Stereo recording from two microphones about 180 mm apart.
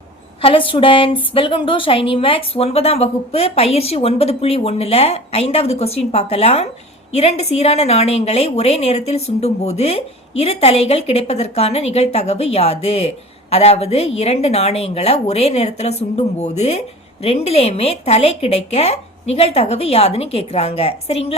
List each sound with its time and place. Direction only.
0.4 s a woman's voice: 30° left (ahead or behind)